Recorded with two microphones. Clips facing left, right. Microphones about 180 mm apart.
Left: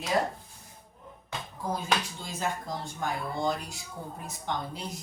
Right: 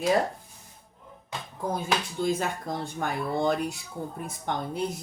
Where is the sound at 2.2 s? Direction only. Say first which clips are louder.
Right 6 dB; 60° right (ahead or behind).